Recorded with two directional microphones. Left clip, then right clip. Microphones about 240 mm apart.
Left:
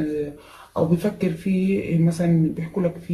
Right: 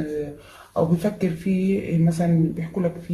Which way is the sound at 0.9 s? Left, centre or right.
Centre.